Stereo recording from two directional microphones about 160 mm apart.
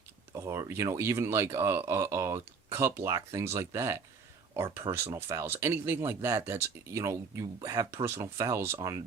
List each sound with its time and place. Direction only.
0.3 s speech: 15° right (ahead or behind)